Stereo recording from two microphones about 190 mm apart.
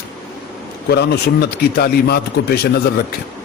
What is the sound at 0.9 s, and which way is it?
A man's voice, 60° left (ahead or behind).